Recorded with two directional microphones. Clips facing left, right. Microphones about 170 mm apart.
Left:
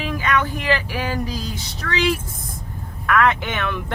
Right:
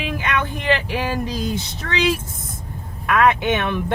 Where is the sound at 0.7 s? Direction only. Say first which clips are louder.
Right 4 dB; 20° right (ahead or behind).